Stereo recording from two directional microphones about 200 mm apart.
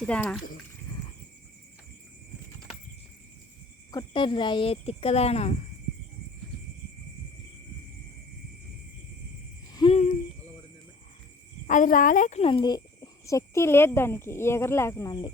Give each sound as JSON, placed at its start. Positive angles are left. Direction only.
{"t": 0.0, "sound": "speech", "side_deg": 5}
{"t": 3.9, "sound": "speech", "side_deg": 25}
{"t": 9.7, "sound": "hoot", "side_deg": 25}
{"t": 11.7, "sound": "speech", "side_deg": 40}